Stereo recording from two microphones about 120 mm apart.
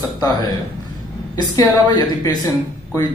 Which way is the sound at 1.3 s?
35° left (ahead or behind).